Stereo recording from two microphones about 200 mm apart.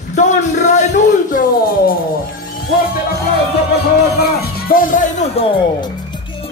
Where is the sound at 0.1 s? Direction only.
35° left (ahead or behind).